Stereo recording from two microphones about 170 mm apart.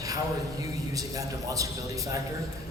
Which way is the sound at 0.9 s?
20° right (ahead or behind).